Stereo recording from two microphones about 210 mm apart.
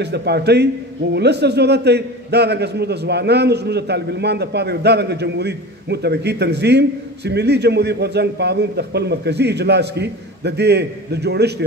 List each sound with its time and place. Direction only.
0.0 s a man's voice: 50° right (ahead or behind)